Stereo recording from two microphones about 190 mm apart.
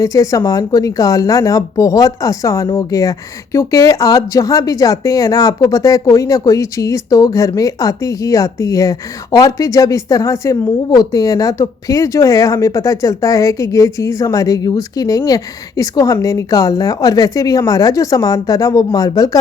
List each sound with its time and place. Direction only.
0.0 s speech: 15° left (ahead or behind)